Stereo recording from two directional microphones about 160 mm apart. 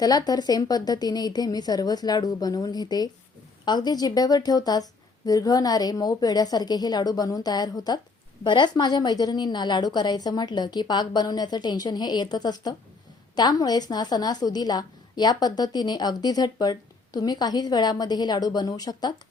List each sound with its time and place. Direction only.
0.0 s a woman's voice: 25° left (ahead or behind)